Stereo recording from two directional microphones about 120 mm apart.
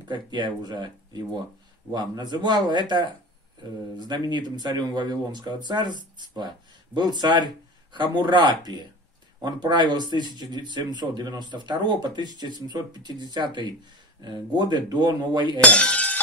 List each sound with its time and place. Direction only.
0.1 s speech: 40° right (ahead or behind)
15.6 s breaking: 10° left (ahead or behind)